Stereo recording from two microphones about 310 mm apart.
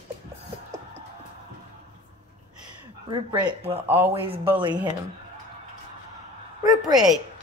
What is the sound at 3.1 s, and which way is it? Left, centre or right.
Speech, centre.